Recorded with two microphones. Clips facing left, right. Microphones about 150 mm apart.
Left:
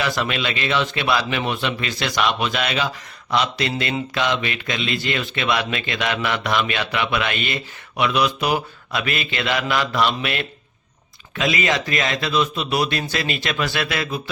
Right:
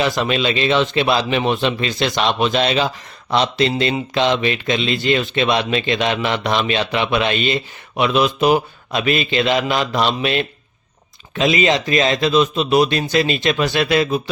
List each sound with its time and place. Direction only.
0.0 s speech: 25° right (ahead or behind)